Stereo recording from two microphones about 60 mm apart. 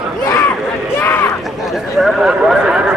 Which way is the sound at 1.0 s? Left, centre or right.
Left.